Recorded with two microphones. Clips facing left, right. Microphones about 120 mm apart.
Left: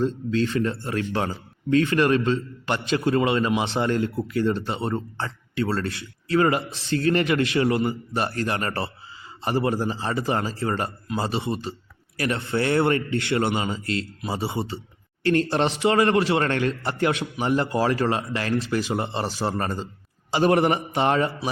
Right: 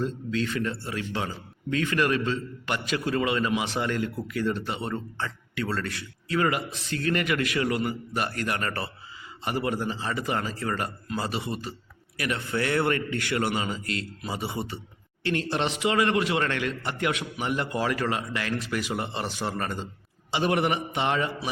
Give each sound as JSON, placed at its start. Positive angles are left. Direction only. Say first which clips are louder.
{"t": 0.0, "sound": "a man's voice", "louder": "left 5 dB", "side_deg": 30}
{"t": 0.7, "sound": "a man's voice", "louder": "left 5 dB", "side_deg": 50}
{"t": 15.2, "sound": "a man's voice", "louder": "left 6 dB", "side_deg": 40}